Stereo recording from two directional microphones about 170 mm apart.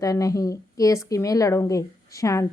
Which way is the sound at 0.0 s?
20° left (ahead or behind).